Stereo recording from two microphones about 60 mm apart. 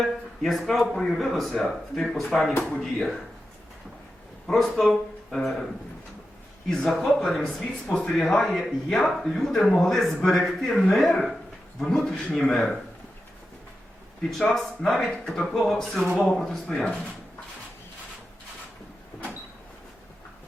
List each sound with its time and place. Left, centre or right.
0.0 s speech: centre
4.4 s speech: centre
6.7 s speech: centre
14.3 s speech: centre